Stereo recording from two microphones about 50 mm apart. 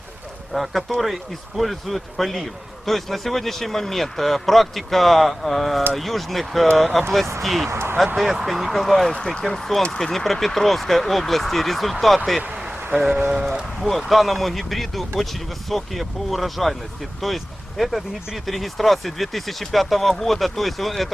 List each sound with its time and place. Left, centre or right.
0.5 s a man's voice: centre
7.7 s a sound: right
8.0 s a man's voice: centre
9.1 s speech: centre
9.4 s a man's voice: centre
9.8 s a man's voice: centre
13.0 s speech: centre
13.8 s a man's voice: centre